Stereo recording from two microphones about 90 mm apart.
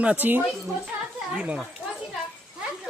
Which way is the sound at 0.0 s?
15° right (ahead or behind).